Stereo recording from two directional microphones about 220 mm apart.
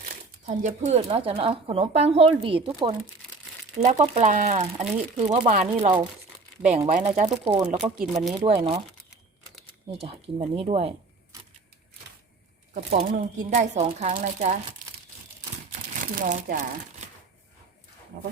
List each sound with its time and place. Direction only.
0.4 s speech: 35° right (ahead or behind)
3.9 s speech: 25° right (ahead or behind)
8.3 s speech: 20° right (ahead or behind)
10.0 s speech: 25° right (ahead or behind)
12.7 s speech: 35° right (ahead or behind)
16.1 s speech: 35° right (ahead or behind)